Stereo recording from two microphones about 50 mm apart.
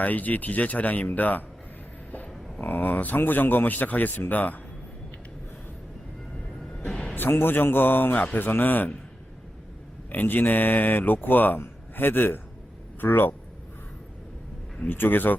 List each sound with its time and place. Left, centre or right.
0.0 s speech: left
2.6 s speech: left
6.7 s music: centre
7.2 s a man's voice: left
10.1 s a man's voice: left
14.8 s speech: left